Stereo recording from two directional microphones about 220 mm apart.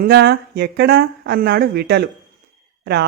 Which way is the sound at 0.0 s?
50° right (ahead or behind).